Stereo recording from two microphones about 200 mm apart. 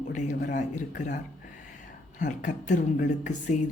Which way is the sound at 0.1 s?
40° left (ahead or behind).